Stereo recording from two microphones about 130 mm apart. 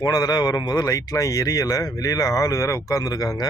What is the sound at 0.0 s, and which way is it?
A man's voice, 30° left (ahead or behind).